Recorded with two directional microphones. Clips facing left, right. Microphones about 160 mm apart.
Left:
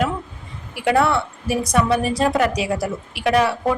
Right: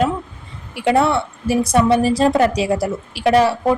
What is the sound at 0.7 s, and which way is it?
A woman's voice, 25° right (ahead or behind).